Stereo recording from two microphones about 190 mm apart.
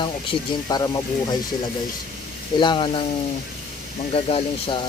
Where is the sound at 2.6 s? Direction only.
25° left (ahead or behind).